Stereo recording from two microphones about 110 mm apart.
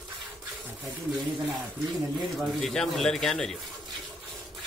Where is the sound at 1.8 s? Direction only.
5° right (ahead or behind).